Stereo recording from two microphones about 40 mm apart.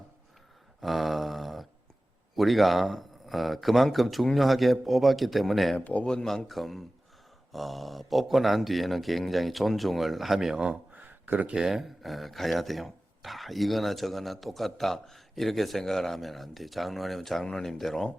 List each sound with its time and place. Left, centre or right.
0.8 s a sound: centre
2.3 s speech: centre
5.8 s speech: left
6.2 s speech: centre
10.5 s speech: right
10.9 s a sound: right
11.5 s speech: centre
17.4 s speech: centre
17.7 s speech: centre